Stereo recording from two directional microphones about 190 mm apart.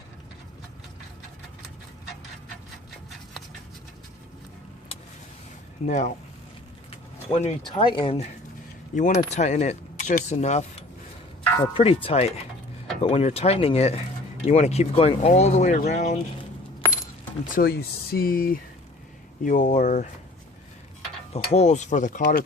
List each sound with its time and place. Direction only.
5.8 s speech: 40° left (ahead or behind)
7.3 s speech: 30° left (ahead or behind)
11.7 s speech: 30° left (ahead or behind)
17.5 s speech: 55° left (ahead or behind)
21.3 s speech: 35° left (ahead or behind)